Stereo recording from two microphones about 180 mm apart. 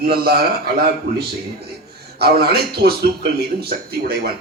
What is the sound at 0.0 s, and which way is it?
Speech, 60° right (ahead or behind).